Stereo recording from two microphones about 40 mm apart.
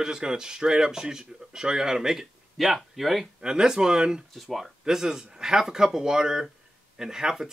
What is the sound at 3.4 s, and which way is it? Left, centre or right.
Speech, centre.